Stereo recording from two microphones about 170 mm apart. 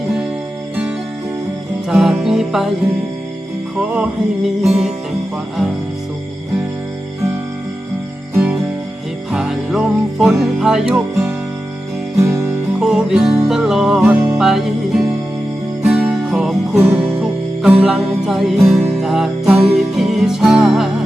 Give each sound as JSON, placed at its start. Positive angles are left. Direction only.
{"t": 1.9, "sound": "music", "side_deg": 0}
{"t": 3.8, "sound": "music", "side_deg": -10}
{"t": 9.3, "sound": "music", "side_deg": 0}
{"t": 12.8, "sound": "music", "side_deg": -5}